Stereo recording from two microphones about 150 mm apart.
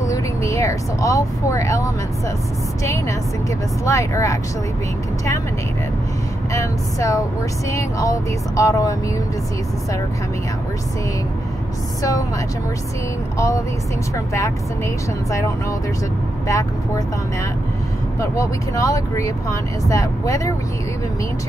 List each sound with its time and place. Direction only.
0.0 s speech: 20° left (ahead or behind)
6.5 s speech: 20° left (ahead or behind)
12.0 s speech: 20° left (ahead or behind)
14.1 s speech: 20° left (ahead or behind)
16.4 s speech: 20° left (ahead or behind)
18.2 s speech: 20° left (ahead or behind)